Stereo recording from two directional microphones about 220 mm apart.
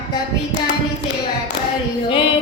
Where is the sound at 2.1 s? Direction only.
25° left (ahead or behind).